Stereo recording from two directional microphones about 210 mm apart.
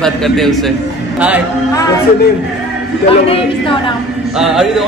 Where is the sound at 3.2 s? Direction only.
25° left (ahead or behind).